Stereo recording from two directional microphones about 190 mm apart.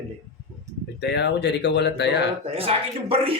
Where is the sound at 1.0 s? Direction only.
65° left (ahead or behind).